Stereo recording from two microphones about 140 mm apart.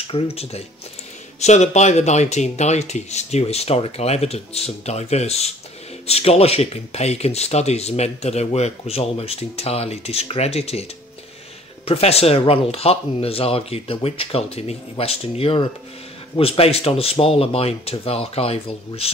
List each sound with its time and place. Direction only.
0.0 s speech: 45° left (ahead or behind)